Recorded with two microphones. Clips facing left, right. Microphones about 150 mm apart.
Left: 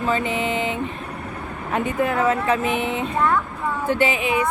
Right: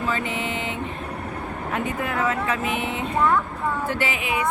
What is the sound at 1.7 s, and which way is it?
Speech, 25° left (ahead or behind).